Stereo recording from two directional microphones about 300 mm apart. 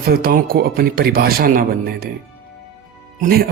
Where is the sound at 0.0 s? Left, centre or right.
Right.